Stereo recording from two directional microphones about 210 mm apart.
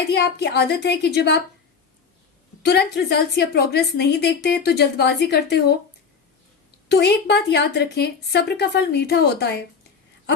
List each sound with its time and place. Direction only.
0.1 s a woman's voice: 50° left (ahead or behind)
2.6 s a woman's voice: 55° left (ahead or behind)
6.8 s a woman's voice: 50° left (ahead or behind)